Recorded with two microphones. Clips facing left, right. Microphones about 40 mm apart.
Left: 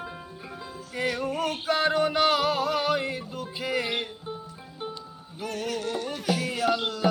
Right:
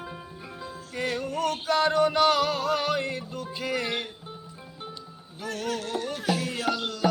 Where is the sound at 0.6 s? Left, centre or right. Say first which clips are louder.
Left 1 dB; centre.